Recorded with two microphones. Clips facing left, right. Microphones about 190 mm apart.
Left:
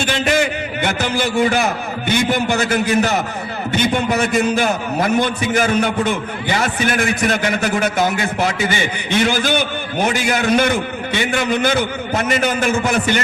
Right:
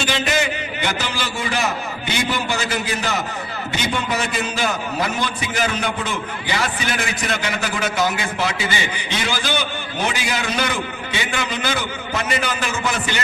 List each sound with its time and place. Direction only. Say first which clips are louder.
0.0 s a man's voice: left 4 dB; 50° left (ahead or behind)